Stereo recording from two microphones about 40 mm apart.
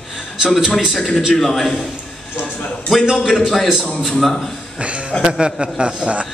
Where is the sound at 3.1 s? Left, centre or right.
Centre.